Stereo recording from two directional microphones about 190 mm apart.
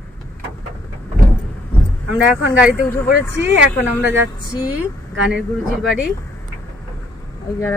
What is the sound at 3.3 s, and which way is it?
Speech, 70° right (ahead or behind).